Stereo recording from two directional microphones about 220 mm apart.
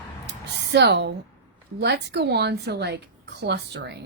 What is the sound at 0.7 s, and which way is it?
Speech, 50° right (ahead or behind).